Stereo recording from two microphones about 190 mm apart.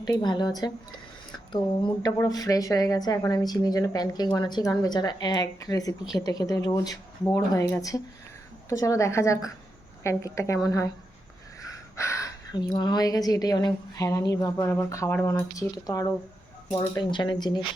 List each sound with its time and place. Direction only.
0.0 s a woman's voice: 20° left (ahead or behind)
11.9 s a woman's voice: 15° left (ahead or behind)